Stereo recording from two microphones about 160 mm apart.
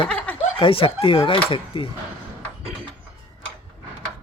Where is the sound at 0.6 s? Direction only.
35° left (ahead or behind).